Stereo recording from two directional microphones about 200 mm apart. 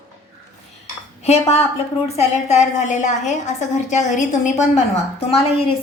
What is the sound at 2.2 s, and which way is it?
A woman's voice, 35° left (ahead or behind).